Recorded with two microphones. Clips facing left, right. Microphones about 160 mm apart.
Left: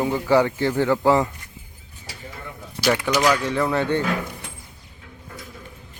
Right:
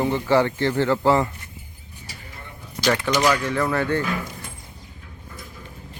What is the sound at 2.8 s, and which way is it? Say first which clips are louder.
Speech: even; 10° left (ahead or behind).